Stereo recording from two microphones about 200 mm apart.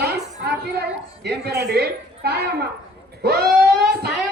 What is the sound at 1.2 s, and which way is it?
A woman's voice, 50° right (ahead or behind).